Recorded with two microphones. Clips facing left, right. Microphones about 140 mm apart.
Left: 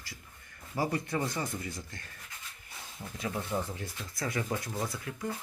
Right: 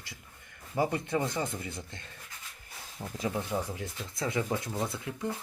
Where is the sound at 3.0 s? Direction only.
35° right (ahead or behind).